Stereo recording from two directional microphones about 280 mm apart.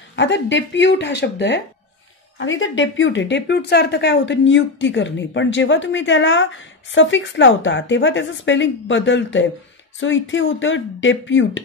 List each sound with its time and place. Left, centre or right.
0.1 s speech: left